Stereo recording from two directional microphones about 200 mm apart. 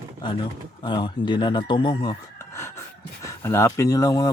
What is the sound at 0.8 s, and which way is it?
Speech, 25° left (ahead or behind).